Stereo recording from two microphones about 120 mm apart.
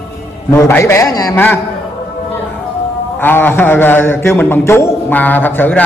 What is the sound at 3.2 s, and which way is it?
A man's voice, 15° left (ahead or behind).